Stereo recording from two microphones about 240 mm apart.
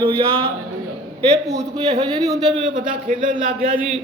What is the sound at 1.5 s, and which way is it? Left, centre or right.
A man's voice, right.